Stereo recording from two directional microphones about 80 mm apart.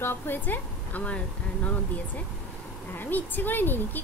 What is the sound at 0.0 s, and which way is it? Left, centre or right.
A woman's voice, left.